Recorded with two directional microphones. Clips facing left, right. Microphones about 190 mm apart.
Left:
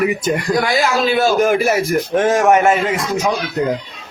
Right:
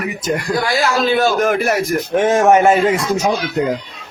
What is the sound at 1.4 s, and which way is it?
Speech, centre (ahead or behind).